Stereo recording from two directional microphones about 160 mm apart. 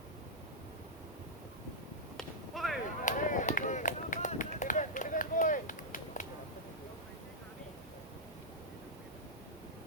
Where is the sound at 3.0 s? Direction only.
55° left (ahead or behind).